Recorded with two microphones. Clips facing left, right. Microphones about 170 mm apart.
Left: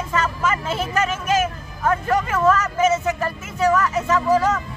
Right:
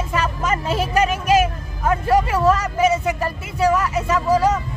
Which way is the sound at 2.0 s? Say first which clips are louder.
Right 4 dB; 35° right (ahead or behind).